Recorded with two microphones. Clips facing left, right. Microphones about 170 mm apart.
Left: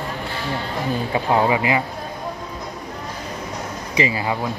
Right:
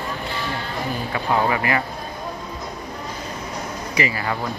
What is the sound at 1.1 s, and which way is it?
Speech, 20° left (ahead or behind).